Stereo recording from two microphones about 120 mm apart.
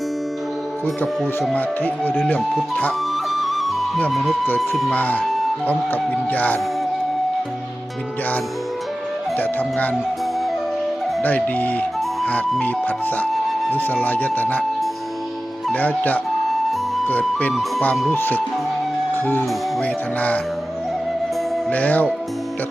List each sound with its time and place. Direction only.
1.5 s speech: 15° left (ahead or behind)
3.3 s music: centre (ahead or behind)
4.1 s speech: centre (ahead or behind)
4.9 s speech: 15° left (ahead or behind)
9.4 s speech: 15° left (ahead or behind)
11.2 s speech: 15° left (ahead or behind)
12.5 s music: 10° left (ahead or behind)
13.7 s speech: 15° left (ahead or behind)
15.7 s speech: 15° left (ahead or behind)
21.7 s speech: 10° left (ahead or behind)